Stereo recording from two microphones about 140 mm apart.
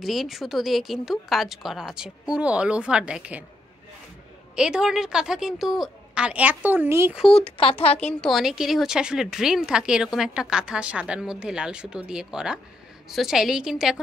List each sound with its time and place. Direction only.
0.0 s a woman's voice: centre (ahead or behind)
4.6 s a woman's voice: 5° right (ahead or behind)
7.3 s speech: 45° left (ahead or behind)
8.0 s a woman's voice: 5° left (ahead or behind)